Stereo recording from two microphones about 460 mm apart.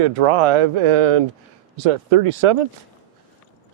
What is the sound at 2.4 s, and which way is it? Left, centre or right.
Speech, right.